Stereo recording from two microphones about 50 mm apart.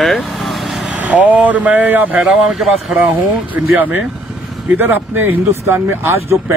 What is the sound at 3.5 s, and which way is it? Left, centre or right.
Speech, right.